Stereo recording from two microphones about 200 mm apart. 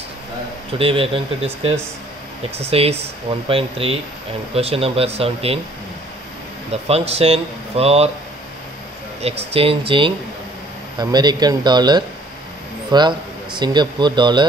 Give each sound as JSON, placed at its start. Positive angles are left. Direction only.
{"t": 0.7, "sound": "speech", "side_deg": -30}
{"t": 6.7, "sound": "speech", "side_deg": -30}
{"t": 9.2, "sound": "speech", "side_deg": -30}